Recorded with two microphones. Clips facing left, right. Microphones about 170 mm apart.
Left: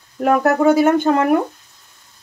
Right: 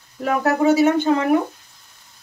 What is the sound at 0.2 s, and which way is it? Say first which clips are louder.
Speech: left 4 dB; 55° left (ahead or behind).